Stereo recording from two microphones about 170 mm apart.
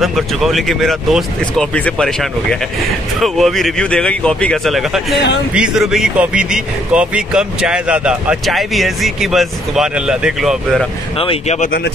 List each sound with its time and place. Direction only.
0.0 s speech: centre (ahead or behind)
11.1 s speech: 35° left (ahead or behind)